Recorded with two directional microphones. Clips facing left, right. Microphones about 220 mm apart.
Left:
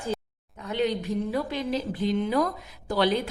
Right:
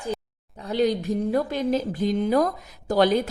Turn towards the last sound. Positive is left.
turn(degrees=-45)  # may be behind; listen again after turning